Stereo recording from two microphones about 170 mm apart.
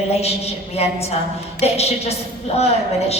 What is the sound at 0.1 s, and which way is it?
A woman's voice, 35° left (ahead or behind).